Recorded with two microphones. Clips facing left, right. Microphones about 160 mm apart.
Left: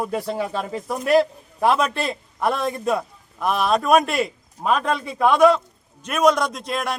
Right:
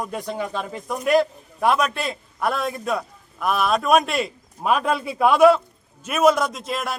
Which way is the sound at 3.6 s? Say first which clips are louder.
Left 1 dB; centre (ahead or behind).